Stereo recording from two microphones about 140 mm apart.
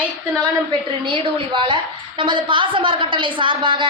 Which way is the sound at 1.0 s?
40° right (ahead or behind).